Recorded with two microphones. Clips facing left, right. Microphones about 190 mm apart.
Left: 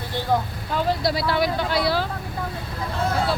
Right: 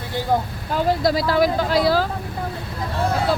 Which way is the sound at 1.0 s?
45° right (ahead or behind).